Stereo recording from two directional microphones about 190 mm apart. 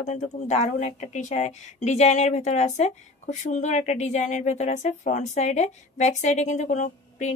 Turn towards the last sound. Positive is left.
turn(degrees=40)  # may be behind; listen again after turning